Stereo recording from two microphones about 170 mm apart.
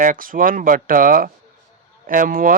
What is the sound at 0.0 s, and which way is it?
Speech, 55° right (ahead or behind).